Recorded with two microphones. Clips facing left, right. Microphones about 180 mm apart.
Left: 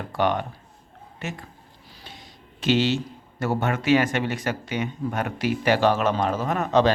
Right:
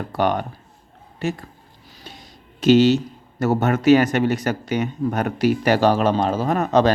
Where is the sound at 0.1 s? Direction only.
40° right (ahead or behind).